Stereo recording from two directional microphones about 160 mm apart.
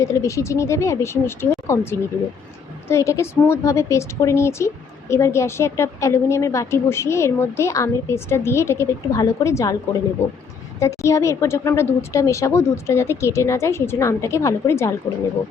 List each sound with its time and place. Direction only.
0.0 s a woman's voice: 20° left (ahead or behind)
10.8 s a woman's voice: 20° left (ahead or behind)